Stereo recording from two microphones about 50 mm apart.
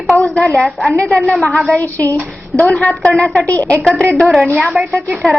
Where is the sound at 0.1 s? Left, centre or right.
Left.